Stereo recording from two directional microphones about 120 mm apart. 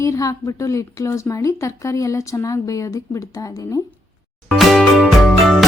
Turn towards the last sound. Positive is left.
turn(degrees=0)  # may be behind; listen again after turning